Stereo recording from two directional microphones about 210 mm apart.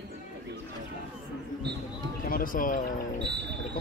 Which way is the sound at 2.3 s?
40° left (ahead or behind).